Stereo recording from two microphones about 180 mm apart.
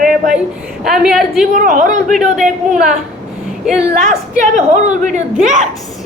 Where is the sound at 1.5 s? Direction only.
45° right (ahead or behind).